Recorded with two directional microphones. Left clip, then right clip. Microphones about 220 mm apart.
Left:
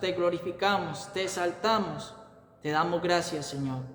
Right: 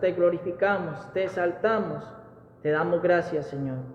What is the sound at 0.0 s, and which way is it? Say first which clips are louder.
A man's voice: right 5 dB; 35° left (ahead or behind).